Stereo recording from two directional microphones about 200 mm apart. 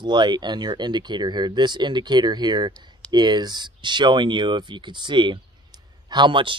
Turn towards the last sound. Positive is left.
turn(degrees=-25)  # may be behind; listen again after turning